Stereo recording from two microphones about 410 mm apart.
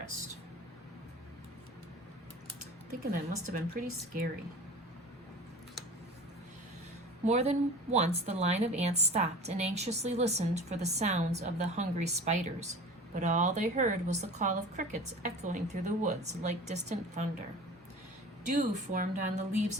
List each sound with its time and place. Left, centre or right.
3.1 s a woman's voice: centre
7.3 s a woman's voice: centre
18.4 s a woman's voice: centre